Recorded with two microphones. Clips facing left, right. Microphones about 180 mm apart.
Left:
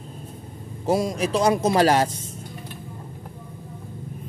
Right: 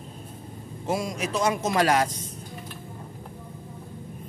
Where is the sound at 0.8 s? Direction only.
35° left (ahead or behind).